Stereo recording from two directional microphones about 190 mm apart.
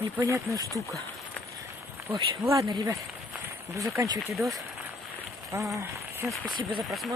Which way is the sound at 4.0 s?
15° right (ahead or behind).